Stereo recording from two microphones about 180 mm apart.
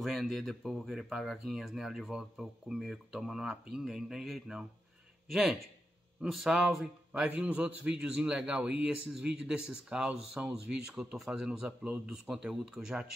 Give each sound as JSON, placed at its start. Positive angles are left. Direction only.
{"t": 0.0, "sound": "speech", "side_deg": 0}